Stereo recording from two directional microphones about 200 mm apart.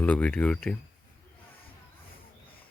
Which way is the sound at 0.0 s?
5° left (ahead or behind).